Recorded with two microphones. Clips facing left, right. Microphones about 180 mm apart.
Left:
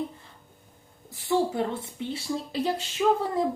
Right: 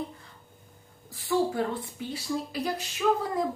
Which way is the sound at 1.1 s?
20° left (ahead or behind).